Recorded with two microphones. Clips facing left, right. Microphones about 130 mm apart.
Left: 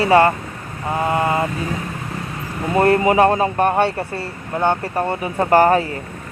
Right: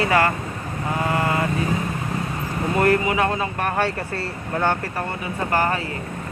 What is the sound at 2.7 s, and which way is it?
Speech, 30° left (ahead or behind).